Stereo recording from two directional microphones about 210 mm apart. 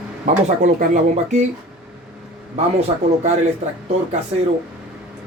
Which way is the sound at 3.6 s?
30° right (ahead or behind).